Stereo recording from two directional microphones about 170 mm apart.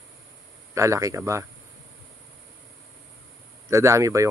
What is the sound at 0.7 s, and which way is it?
Speech, 20° right (ahead or behind).